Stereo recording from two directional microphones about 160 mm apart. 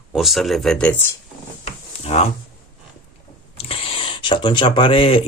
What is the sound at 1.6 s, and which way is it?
Drawer open or close, 40° left (ahead or behind).